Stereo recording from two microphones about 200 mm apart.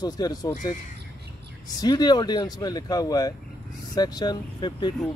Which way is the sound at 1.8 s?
20° left (ahead or behind).